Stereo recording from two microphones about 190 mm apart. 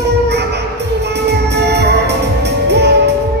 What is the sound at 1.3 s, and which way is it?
Music, 60° right (ahead or behind).